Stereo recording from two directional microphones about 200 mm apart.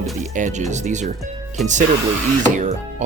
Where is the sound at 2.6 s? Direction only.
35° right (ahead or behind).